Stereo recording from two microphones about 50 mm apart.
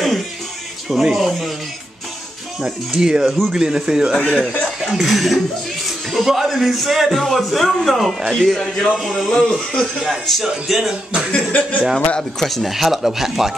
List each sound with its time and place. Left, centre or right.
0.8 s a man's voice: centre
2.6 s speech: centre
4.3 s a man's voice: centre
11.3 s speech: left
12.2 s a man's voice: centre